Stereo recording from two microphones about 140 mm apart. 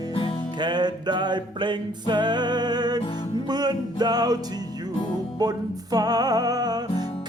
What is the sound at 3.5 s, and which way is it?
Music, 30° right (ahead or behind).